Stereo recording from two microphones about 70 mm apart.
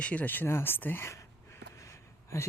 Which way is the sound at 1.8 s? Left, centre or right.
Left.